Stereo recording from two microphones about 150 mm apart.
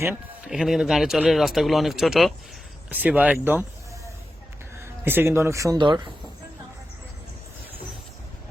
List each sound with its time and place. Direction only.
0.0 s speech: 15° right (ahead or behind)
0.5 s speech: centre (ahead or behind); by 6.1 s 30° right (ahead or behind)